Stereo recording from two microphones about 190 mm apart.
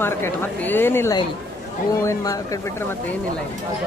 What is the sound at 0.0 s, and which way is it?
A woman's voice, 10° left (ahead or behind).